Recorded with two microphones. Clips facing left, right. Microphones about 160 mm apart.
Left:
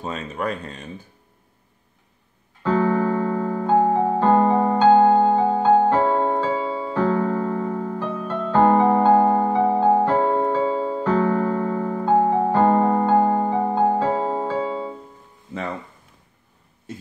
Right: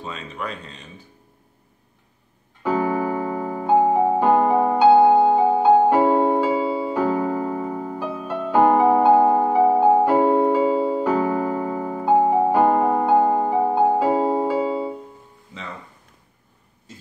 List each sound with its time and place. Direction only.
0.0 s speech: 45° left (ahead or behind)
2.6 s keyboard: 10° right (ahead or behind)